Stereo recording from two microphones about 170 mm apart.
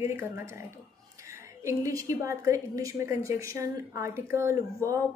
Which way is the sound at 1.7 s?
20° right (ahead or behind).